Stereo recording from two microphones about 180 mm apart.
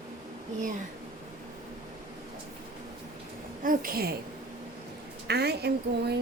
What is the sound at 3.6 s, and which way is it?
Speech, 55° right (ahead or behind).